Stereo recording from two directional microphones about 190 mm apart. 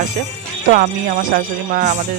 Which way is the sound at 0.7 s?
45° right (ahead or behind).